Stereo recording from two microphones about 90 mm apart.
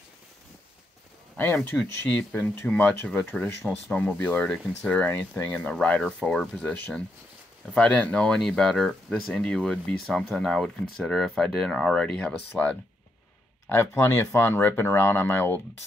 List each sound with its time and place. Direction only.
1.3 s speech: 20° left (ahead or behind)
13.7 s speech: 30° left (ahead or behind)